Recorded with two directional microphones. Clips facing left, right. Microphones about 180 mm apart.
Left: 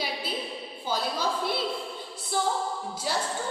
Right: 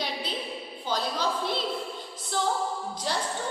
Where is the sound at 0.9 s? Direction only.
10° left (ahead or behind).